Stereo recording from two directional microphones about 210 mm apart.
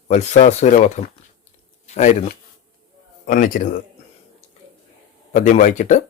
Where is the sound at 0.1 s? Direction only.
35° left (ahead or behind).